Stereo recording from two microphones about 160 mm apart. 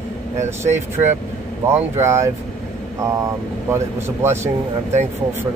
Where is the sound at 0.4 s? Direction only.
15° right (ahead or behind).